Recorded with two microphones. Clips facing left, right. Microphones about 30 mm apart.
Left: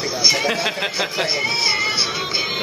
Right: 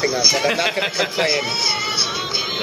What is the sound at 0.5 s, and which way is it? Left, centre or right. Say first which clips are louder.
Speech: right 2 dB; centre.